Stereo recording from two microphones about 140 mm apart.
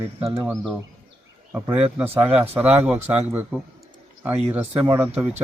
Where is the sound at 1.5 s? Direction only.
15° right (ahead or behind).